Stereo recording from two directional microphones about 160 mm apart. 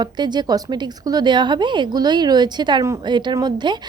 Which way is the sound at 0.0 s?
25° right (ahead or behind).